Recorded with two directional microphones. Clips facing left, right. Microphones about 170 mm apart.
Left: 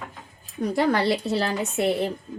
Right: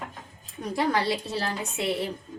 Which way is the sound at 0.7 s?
60° left (ahead or behind).